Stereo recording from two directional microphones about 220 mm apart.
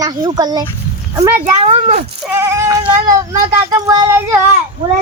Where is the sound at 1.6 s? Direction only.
30° right (ahead or behind).